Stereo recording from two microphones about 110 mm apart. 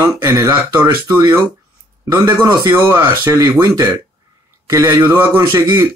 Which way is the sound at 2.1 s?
20° right (ahead or behind).